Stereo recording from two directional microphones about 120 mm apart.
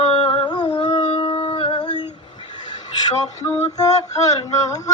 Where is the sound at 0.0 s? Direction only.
45° left (ahead or behind).